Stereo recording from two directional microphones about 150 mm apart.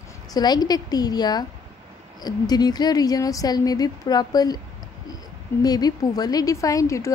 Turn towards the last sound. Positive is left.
turn(degrees=20)  # may be behind; listen again after turning